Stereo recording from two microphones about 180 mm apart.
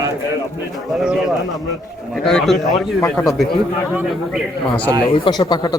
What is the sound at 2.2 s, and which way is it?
Speech, centre (ahead or behind).